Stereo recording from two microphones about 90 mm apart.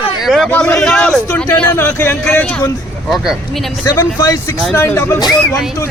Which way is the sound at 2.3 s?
15° left (ahead or behind).